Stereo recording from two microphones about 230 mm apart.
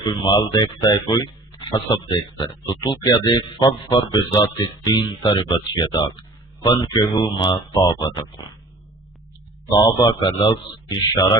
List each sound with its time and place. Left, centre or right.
0.0 s speech: centre
9.8 s speech: centre